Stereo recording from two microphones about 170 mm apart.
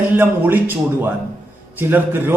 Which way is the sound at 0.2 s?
10° right (ahead or behind).